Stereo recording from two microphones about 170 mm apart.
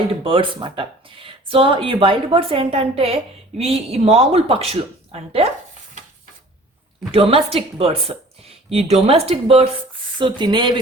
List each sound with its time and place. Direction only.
0.1 s speech: 30° right (ahead or behind)
7.1 s speech: 35° right (ahead or behind)